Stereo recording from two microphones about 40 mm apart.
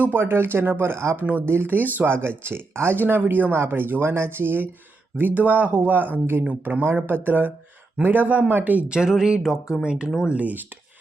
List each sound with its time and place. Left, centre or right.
0.0 s speech: right
2.0 s speech: right
3.5 s speech: right
4.0 s speech: right
5.1 s speech: right
6.9 s speech: right
8.9 s speech: centre
10.2 s speech: right